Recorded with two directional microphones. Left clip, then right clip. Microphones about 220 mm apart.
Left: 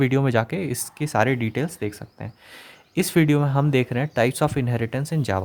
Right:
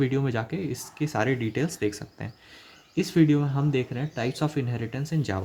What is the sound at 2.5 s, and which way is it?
Speech, 30° left (ahead or behind).